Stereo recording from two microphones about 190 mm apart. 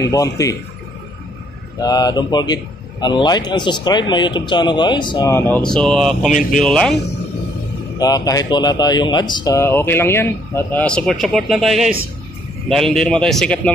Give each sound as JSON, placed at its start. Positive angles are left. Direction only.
{"t": 0.0, "sound": "speech", "side_deg": 15}
{"t": 1.8, "sound": "a man's voice", "side_deg": 20}
{"t": 8.0, "sound": "speech", "side_deg": 20}